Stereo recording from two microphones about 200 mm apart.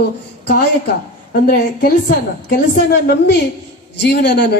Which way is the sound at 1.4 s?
45° left (ahead or behind).